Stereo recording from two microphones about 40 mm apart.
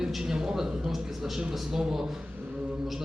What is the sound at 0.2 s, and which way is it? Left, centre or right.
A man's voice, centre.